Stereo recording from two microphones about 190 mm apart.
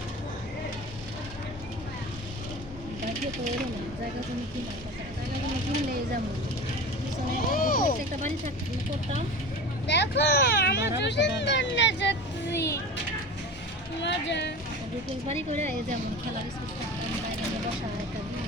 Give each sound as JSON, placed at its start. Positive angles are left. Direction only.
{"t": 7.5, "sound": "vehicle", "side_deg": 45}
{"t": 9.8, "sound": "speech", "side_deg": 65}
{"t": 11.0, "sound": "speech", "side_deg": 65}
{"t": 12.5, "sound": "speech", "side_deg": 15}
{"t": 14.0, "sound": "speech", "side_deg": 65}
{"t": 15.3, "sound": "speech", "side_deg": -35}